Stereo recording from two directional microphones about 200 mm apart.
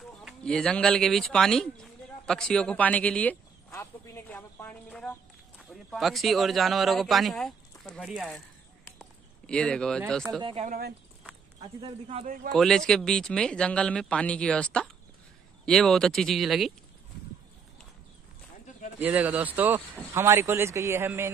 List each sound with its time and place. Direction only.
0.2 s a man's voice: centre (ahead or behind)
9.5 s a man's voice: 5° left (ahead or behind)
10.4 s speech: 30° right (ahead or behind)
10.7 s speech: 50° right (ahead or behind)
11.8 s speech: 30° right (ahead or behind)
12.5 s a man's voice: 5° left (ahead or behind)
18.9 s a man's voice: 10° right (ahead or behind)